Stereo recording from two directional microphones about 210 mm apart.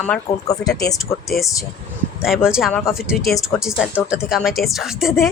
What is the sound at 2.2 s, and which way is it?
Speech, 5° right (ahead or behind).